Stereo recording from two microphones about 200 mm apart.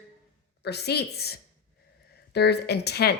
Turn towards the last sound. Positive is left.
turn(degrees=55)  # may be behind; listen again after turning